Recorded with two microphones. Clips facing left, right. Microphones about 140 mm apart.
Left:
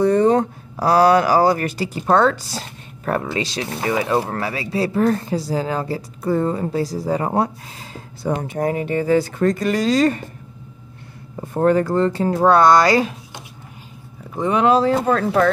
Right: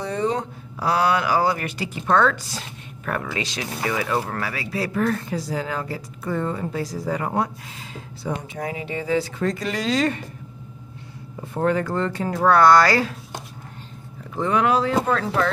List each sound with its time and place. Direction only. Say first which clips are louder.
0.0 s speech: left 9 dB; 50° left (ahead or behind)
11.4 s speech: left 5 dB; 40° left (ahead or behind); by 13.1 s 20° left (ahead or behind)
14.3 s speech: left 4 dB; 20° left (ahead or behind)
15.0 s speech: left 5 dB; 45° left (ahead or behind)